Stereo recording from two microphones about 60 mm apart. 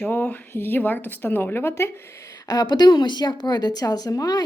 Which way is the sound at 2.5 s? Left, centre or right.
Left.